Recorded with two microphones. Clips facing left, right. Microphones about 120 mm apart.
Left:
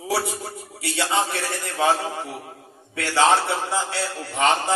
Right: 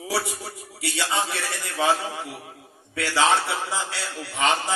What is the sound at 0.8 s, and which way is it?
A man's voice, 45° left (ahead or behind).